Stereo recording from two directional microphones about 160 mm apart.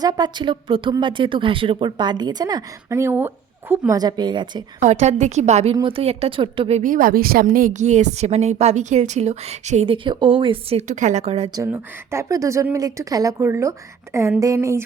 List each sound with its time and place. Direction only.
0.0 s speech: 25° right (ahead or behind)
4.8 s a woman's voice: 45° right (ahead or behind)
5.7 s a woman's voice: 35° right (ahead or behind)
6.8 s a woman's voice: 60° right (ahead or behind); by 11.5 s 40° right (ahead or behind)
11.5 s speech: 15° right (ahead or behind)